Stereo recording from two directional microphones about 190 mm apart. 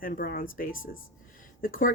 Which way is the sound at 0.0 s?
50° left (ahead or behind).